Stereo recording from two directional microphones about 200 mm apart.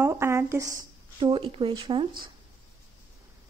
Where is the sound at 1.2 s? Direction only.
25° right (ahead or behind).